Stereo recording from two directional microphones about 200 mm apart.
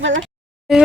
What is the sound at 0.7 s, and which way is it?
Speech, centre (ahead or behind).